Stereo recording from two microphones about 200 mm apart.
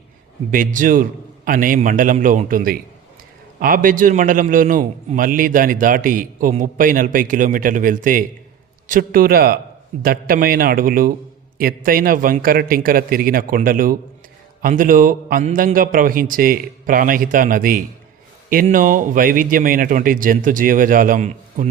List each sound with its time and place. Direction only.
0.5 s a man's voice: 40° right (ahead or behind)